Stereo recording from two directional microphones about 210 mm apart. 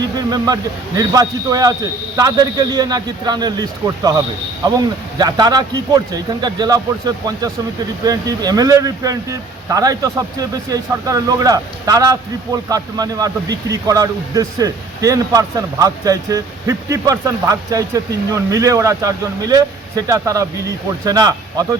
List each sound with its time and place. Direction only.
0.3 s a man's voice: 20° right (ahead or behind)
8.0 s speech: 15° right (ahead or behind)